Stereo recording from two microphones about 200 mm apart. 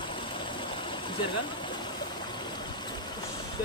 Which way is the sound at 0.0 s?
25° left (ahead or behind).